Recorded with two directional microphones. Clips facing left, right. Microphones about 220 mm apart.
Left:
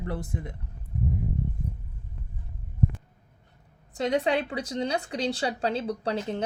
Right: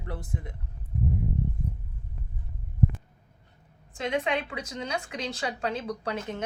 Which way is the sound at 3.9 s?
35° left (ahead or behind).